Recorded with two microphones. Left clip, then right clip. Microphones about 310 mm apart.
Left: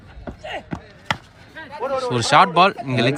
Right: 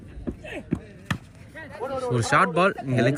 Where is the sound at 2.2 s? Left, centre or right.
Centre.